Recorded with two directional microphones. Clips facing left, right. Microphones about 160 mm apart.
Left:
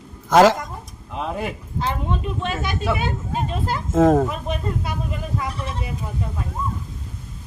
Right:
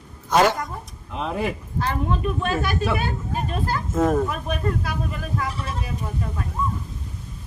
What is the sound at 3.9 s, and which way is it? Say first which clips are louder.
Speech: left 5 dB; 90° left.